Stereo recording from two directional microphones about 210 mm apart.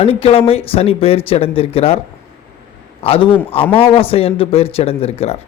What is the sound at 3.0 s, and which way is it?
A man's voice, 25° left (ahead or behind).